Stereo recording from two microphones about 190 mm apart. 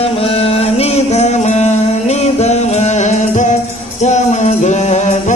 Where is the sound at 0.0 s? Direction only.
30° left (ahead or behind).